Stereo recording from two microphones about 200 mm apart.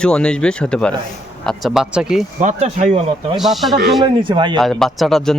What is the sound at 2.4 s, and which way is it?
Speech, 35° right (ahead or behind).